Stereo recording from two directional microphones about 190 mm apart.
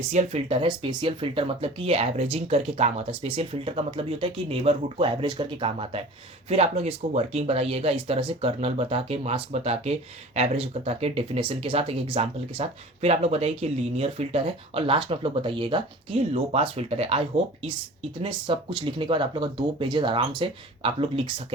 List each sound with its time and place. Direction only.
0.0 s speech: 35° right (ahead or behind)